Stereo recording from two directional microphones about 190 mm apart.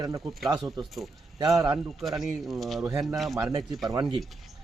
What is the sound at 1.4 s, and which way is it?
Speech, 20° right (ahead or behind).